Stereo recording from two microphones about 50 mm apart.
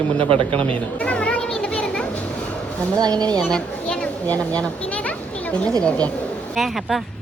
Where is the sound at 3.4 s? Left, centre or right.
Centre.